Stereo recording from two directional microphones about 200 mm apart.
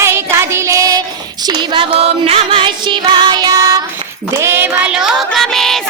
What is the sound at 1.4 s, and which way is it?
Music, 25° right (ahead or behind).